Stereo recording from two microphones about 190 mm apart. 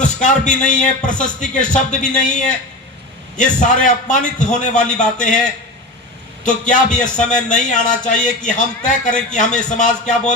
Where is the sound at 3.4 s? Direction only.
40° left (ahead or behind).